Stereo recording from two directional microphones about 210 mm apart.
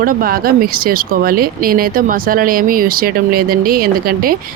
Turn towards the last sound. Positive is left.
turn(degrees=-45)  # may be behind; listen again after turning